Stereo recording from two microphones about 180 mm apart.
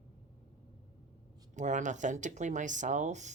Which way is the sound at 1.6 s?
45° right (ahead or behind).